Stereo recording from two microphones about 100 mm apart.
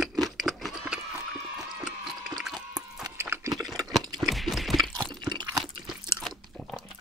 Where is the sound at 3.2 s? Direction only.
20° right (ahead or behind).